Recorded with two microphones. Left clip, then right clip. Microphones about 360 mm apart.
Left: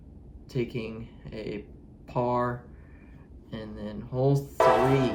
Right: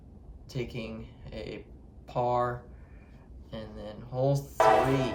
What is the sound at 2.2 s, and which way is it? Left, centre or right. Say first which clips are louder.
Speech: even; right.